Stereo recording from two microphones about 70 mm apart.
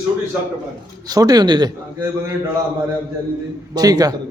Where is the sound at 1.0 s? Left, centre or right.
Right.